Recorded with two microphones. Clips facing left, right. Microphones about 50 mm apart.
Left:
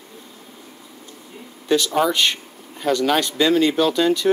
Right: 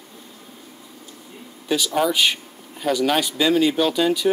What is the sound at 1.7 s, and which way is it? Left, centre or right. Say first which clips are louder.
Speech: left 2 dB; centre.